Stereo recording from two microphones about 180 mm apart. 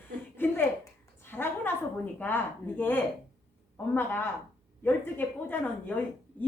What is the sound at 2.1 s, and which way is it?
A woman's voice, 10° left (ahead or behind).